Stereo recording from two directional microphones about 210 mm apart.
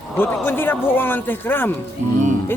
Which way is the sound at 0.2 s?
10° left (ahead or behind).